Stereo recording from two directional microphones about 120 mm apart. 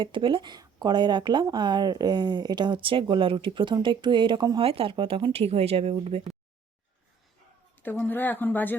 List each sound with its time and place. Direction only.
0.0 s speech: 45° right (ahead or behind)
4.6 s speech: 55° right (ahead or behind)
7.8 s a woman's voice: 15° left (ahead or behind)